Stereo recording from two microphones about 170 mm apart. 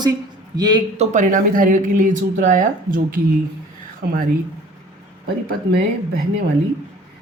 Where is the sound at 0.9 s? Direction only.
45° right (ahead or behind).